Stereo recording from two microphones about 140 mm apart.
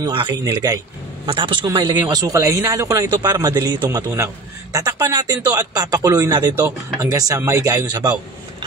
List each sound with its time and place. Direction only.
0.0 s a man's voice: 35° right (ahead or behind)
3.9 s a man's voice: 20° right (ahead or behind)